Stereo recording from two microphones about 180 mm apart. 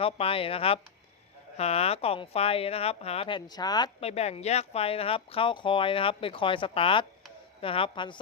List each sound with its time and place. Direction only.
0.0 s speech: 30° left (ahead or behind)
4.0 s speech: 35° left (ahead or behind)